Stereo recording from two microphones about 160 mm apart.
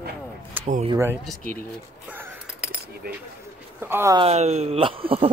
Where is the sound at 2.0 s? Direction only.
10° right (ahead or behind).